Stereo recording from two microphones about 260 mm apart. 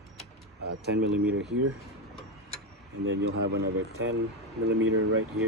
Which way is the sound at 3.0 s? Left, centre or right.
Right.